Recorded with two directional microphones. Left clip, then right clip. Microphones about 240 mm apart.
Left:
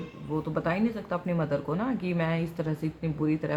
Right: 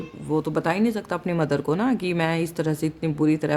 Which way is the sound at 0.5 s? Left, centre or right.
Right.